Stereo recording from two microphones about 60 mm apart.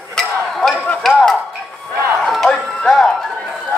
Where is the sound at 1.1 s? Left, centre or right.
Centre.